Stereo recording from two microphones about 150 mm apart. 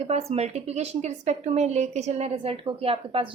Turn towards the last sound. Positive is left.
turn(degrees=-40)  # may be behind; listen again after turning